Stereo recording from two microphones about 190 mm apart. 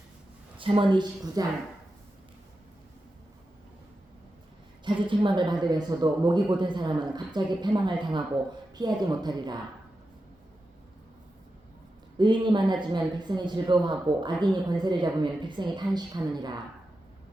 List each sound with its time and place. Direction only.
0.5 s speech: 25° right (ahead or behind)
5.0 s speech: 25° right (ahead or behind)
12.1 s speech: 25° right (ahead or behind)